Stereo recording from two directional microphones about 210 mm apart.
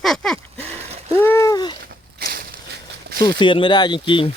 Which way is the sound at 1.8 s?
45° right (ahead or behind).